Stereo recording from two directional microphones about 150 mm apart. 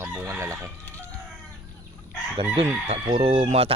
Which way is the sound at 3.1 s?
40° right (ahead or behind).